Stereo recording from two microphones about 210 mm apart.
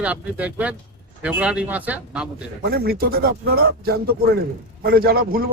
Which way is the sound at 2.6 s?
50° right (ahead or behind).